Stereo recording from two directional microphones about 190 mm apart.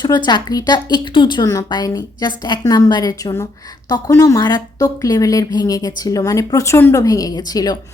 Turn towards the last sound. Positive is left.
turn(degrees=20)  # may be behind; listen again after turning